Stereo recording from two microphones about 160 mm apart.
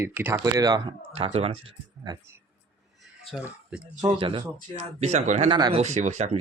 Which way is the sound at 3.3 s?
10° right (ahead or behind).